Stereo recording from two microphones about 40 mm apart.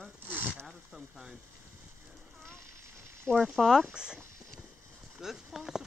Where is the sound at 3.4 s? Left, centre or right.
Centre.